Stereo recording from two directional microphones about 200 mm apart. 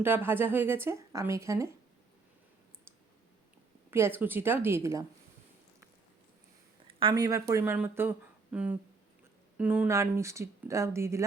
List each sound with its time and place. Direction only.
0.0 s speech: 10° right (ahead or behind)
3.9 s speech: 10° right (ahead or behind)
6.8 s speech: 20° right (ahead or behind)